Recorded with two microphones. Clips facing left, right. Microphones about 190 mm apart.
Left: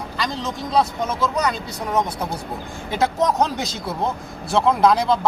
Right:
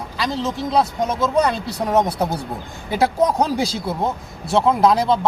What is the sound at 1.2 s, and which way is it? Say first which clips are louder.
Speech: right 5 dB; 30° right (ahead or behind).